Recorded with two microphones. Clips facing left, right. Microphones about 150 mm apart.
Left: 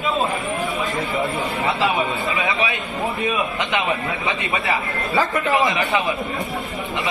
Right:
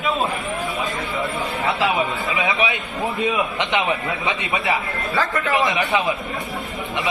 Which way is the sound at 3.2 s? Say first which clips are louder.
Right 1 dB; 20° right (ahead or behind).